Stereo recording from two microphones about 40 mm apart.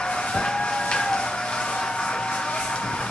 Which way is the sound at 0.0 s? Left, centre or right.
Left.